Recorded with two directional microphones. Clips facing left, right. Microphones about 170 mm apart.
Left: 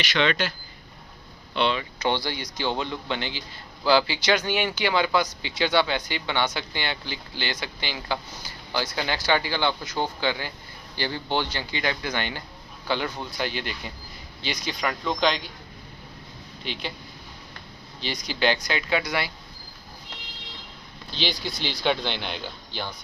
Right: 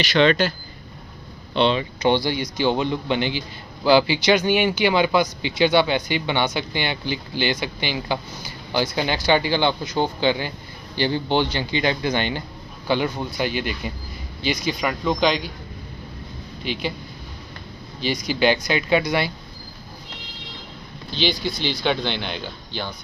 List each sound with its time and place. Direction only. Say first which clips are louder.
0.0 s speech: right 7 dB; 35° right (ahead or behind)
1.5 s speech: right 5 dB; 25° right (ahead or behind)
2.0 s speech: right 7 dB; 15° right (ahead or behind)
16.6 s speech: right 7 dB; 10° right (ahead or behind)
18.0 s speech: right 5 dB; 10° right (ahead or behind)
21.2 s speech: right 6 dB; centre (ahead or behind)